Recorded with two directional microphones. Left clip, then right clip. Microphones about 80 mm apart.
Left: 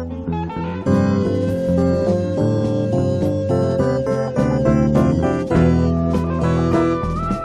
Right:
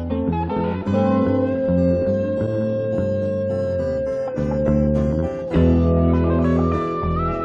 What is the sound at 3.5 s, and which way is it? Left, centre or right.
Music, left.